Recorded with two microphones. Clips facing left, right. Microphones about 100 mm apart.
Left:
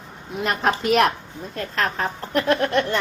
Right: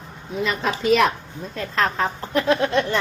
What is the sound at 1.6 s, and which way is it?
A woman's voice, 55° left (ahead or behind).